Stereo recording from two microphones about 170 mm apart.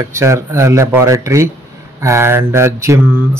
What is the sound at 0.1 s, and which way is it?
Speech, 15° right (ahead or behind).